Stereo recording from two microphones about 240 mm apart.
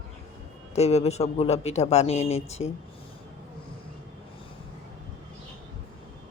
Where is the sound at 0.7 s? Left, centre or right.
Left.